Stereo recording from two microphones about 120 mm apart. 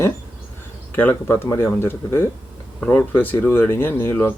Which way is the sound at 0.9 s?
20° left (ahead or behind).